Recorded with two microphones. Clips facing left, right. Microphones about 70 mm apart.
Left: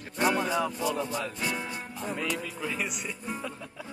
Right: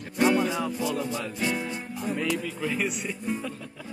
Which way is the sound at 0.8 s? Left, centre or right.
Left.